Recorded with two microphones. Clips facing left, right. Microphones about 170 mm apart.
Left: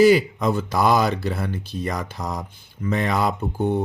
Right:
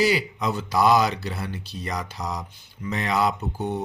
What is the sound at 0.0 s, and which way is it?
Speech, 50° left (ahead or behind).